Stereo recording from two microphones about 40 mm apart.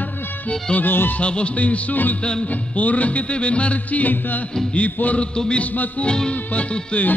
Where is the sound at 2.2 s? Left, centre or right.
Left.